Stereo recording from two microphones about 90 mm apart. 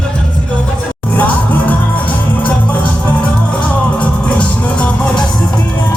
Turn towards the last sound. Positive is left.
turn(degrees=10)  # may be behind; listen again after turning